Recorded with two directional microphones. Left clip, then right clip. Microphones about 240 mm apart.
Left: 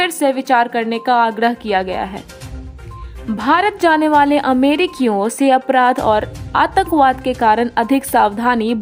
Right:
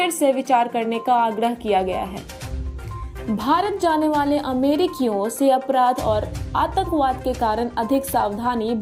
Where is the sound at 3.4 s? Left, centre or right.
Centre.